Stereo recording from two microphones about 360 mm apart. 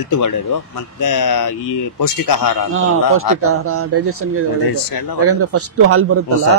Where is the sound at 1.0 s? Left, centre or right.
Left.